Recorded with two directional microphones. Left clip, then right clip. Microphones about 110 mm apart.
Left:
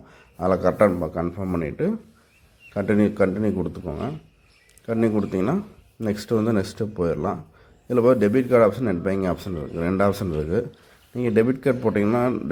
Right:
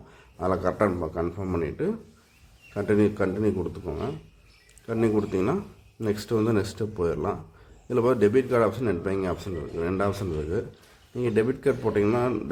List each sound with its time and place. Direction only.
0.1 s a man's voice: 25° left (ahead or behind)